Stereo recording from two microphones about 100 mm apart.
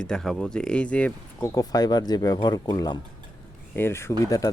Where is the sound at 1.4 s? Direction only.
40° left (ahead or behind).